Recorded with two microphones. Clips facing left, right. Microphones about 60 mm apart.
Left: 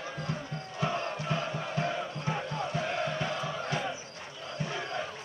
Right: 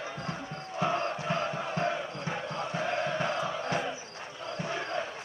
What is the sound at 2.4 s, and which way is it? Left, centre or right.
Chant, right.